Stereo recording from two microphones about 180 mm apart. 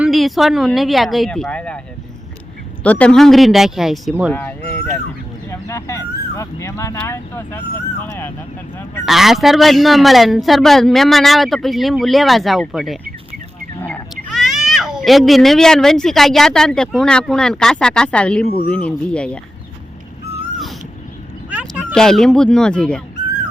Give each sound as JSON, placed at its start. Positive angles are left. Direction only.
{"t": 0.0, "sound": "a man's voice", "side_deg": 0}
{"t": 2.8, "sound": "a man's voice", "side_deg": 5}
{"t": 9.0, "sound": "a man's voice", "side_deg": 0}
{"t": 21.5, "sound": "a sound", "side_deg": -5}
{"t": 21.9, "sound": "a man's voice", "side_deg": 5}